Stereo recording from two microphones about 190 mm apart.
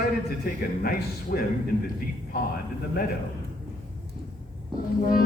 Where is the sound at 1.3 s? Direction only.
50° left (ahead or behind).